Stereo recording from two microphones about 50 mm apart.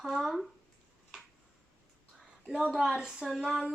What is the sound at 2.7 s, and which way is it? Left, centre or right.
Speech, centre.